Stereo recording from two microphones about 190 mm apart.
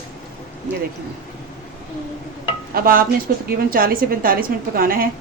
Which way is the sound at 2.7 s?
50° right (ahead or behind).